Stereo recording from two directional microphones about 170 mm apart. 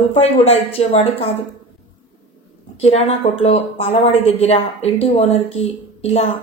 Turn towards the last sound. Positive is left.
turn(degrees=35)  # may be behind; listen again after turning